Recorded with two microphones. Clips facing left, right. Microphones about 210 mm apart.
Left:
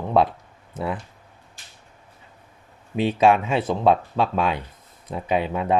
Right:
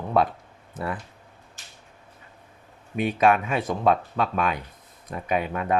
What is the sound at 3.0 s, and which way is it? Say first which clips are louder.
Speech: left 3 dB; 25° left (ahead or behind).